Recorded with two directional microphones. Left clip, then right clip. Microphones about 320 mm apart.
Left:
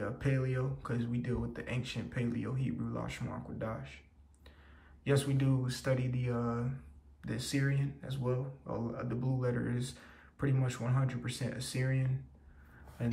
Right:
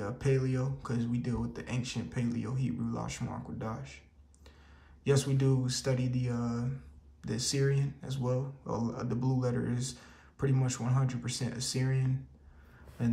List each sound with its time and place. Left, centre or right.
0.0 s speech: centre
5.0 s speech: centre